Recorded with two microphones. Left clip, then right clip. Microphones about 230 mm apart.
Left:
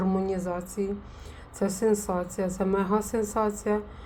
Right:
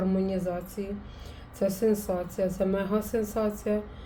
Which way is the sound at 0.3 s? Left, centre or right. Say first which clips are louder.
Left 1 dB; centre.